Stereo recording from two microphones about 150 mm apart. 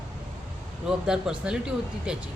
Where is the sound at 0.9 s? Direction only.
5° right (ahead or behind).